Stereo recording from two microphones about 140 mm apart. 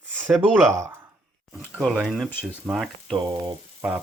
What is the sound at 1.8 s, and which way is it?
Speech, 5° left (ahead or behind).